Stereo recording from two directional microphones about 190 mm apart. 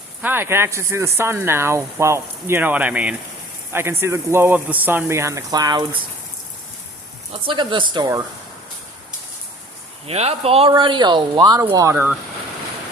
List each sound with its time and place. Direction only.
0.2 s speech: 10° right (ahead or behind)
7.4 s speech: 25° right (ahead or behind)
10.1 s speech: 30° right (ahead or behind); by 12.1 s 15° right (ahead or behind)